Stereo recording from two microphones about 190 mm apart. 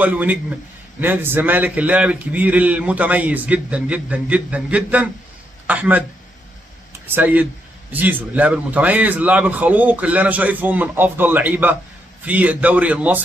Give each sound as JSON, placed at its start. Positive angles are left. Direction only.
{"t": 0.0, "sound": "a man's voice", "side_deg": -10}
{"t": 7.1, "sound": "a man's voice", "side_deg": -10}